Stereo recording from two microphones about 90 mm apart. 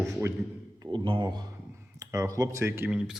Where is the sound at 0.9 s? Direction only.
70° right (ahead or behind).